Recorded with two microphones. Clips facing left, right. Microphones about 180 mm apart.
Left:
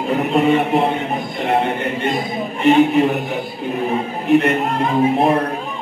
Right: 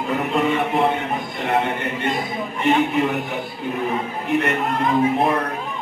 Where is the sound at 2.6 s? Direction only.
25° left (ahead or behind).